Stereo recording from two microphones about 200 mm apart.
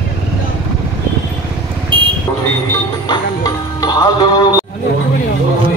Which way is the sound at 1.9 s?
25° right (ahead or behind).